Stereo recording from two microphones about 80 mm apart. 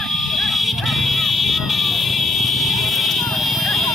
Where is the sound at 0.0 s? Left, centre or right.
Centre.